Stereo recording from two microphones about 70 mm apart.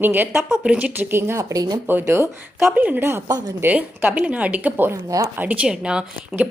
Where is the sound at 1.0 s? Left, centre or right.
Right.